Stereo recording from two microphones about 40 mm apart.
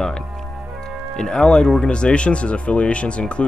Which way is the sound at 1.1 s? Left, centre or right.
Centre.